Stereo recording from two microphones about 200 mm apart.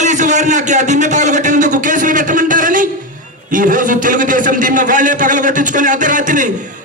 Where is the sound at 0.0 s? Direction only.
35° right (ahead or behind).